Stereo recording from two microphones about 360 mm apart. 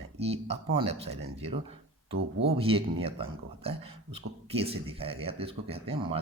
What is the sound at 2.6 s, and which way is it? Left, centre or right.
Speech, centre.